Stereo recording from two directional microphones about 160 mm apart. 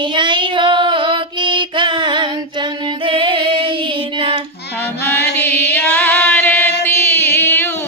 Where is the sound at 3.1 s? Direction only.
30° right (ahead or behind).